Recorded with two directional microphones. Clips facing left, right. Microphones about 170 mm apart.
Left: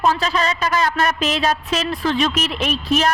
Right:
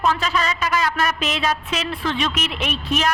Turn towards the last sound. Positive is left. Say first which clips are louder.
# left 3 dB
turn(degrees=35)  # may be behind; listen again after turning